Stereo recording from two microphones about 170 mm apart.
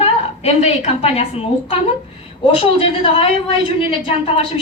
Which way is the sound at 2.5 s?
30° left (ahead or behind).